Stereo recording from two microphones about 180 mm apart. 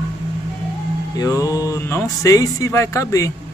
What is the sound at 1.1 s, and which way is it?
Speech, 20° left (ahead or behind).